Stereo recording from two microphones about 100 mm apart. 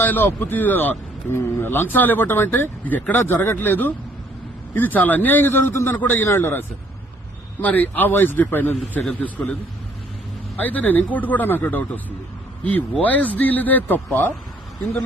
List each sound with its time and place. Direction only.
0.0 s a man's voice: 20° left (ahead or behind)
10.6 s a man's voice: 15° left (ahead or behind)